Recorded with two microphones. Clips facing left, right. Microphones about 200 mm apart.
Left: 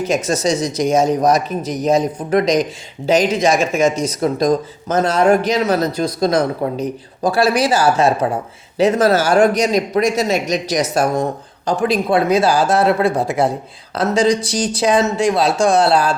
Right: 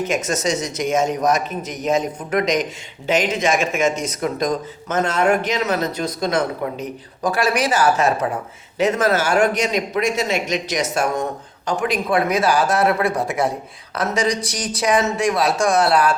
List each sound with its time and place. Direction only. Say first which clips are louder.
0.0 s speech: left 4 dB; 35° left (ahead or behind)